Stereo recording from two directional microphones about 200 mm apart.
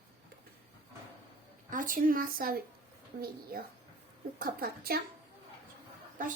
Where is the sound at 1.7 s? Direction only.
40° right (ahead or behind).